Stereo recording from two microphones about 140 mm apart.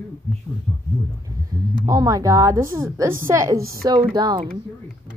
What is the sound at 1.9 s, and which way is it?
A woman's voice, 25° right (ahead or behind).